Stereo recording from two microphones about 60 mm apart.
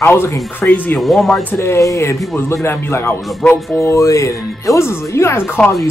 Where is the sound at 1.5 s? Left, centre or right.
Left.